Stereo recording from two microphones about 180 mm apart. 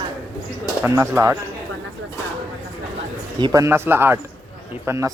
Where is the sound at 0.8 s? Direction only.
15° right (ahead or behind).